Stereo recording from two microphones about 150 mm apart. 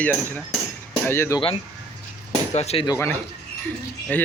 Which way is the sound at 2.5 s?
45° left (ahead or behind).